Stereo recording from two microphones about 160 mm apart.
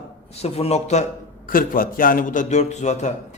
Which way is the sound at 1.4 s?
60° left (ahead or behind).